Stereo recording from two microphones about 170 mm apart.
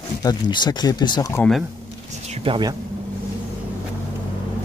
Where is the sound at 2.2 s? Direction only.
35° right (ahead or behind).